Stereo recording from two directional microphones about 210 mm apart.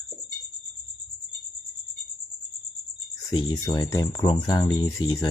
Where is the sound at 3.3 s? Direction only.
20° left (ahead or behind).